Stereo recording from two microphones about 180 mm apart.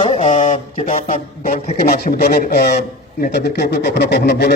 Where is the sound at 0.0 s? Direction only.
40° left (ahead or behind).